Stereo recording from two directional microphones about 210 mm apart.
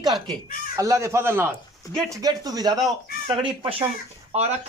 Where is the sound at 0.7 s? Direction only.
15° right (ahead or behind).